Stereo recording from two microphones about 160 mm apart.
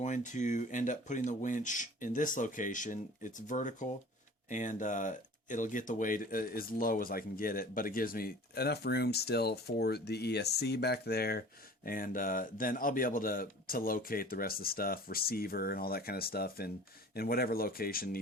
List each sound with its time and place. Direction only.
0.0 s speech: 50° left (ahead or behind); by 11.4 s 75° left (ahead or behind)
11.9 s speech: 60° left (ahead or behind)